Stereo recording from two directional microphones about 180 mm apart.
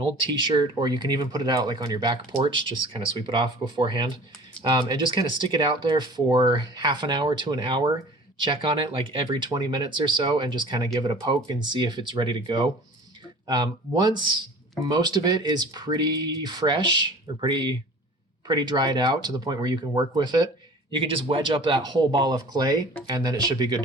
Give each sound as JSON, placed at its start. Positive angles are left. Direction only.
{"t": 0.0, "sound": "speech", "side_deg": -25}